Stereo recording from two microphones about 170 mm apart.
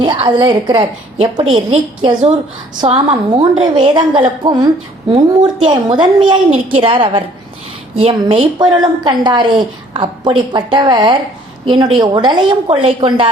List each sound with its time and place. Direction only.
0.0 s a woman's voice: 30° right (ahead or behind)